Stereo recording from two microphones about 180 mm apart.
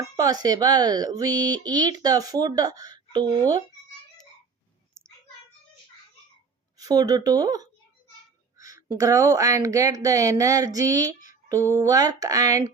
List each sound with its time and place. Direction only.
0.2 s speech: 20° right (ahead or behind)
5.0 s a sound: 5° left (ahead or behind)
6.7 s speech: 20° right (ahead or behind)